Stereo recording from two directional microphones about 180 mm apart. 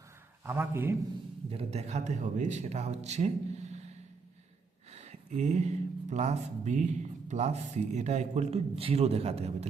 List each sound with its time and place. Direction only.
0.4 s a man's voice: 10° right (ahead or behind)
1.5 s speech: 35° right (ahead or behind)
4.9 s speech: 35° right (ahead or behind)